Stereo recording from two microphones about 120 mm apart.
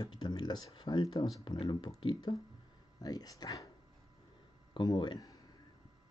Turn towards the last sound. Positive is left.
turn(degrees=30)  # may be behind; listen again after turning